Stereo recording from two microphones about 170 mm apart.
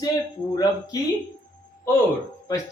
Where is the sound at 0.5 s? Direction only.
20° left (ahead or behind).